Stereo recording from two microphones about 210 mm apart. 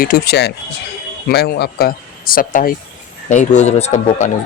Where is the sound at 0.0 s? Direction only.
45° left (ahead or behind).